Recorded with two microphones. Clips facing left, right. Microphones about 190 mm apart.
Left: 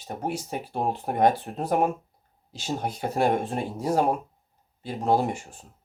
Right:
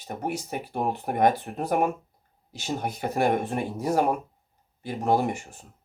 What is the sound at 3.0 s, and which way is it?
Speech, 55° right (ahead or behind).